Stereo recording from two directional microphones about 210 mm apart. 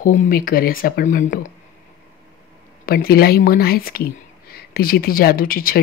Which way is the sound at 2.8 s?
45° left (ahead or behind).